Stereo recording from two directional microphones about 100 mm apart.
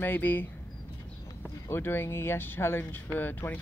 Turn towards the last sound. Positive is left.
turn(degrees=20)  # may be behind; listen again after turning